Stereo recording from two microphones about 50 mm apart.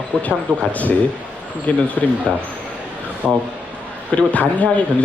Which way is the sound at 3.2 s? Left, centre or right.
Right.